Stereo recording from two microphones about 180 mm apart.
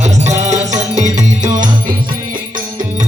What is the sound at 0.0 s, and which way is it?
Music, 40° right (ahead or behind).